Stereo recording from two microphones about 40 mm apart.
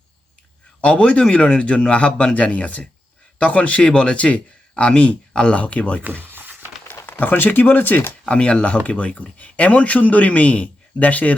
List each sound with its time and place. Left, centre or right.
0.8 s a man's voice: left
6.0 s a sound: right
6.9 s speech: left
8.3 s a man's voice: left